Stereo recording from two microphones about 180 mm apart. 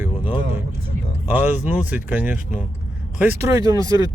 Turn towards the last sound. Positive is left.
turn(degrees=-20)  # may be behind; listen again after turning